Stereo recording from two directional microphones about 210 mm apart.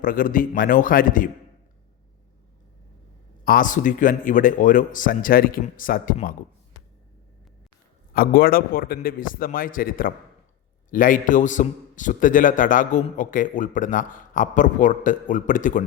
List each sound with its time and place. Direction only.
0.0 s a man's voice: 40° left (ahead or behind)
3.4 s a man's voice: 40° left (ahead or behind)
8.1 s a man's voice: 45° left (ahead or behind)